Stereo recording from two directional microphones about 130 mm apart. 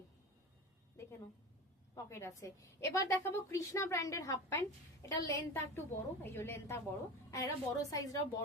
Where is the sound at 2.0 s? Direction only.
20° left (ahead or behind).